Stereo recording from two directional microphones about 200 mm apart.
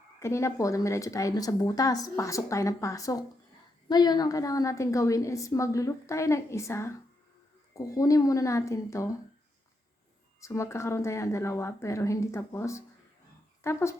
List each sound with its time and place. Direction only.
0.2 s a woman's voice: 15° left (ahead or behind)
10.4 s a woman's voice: 15° left (ahead or behind)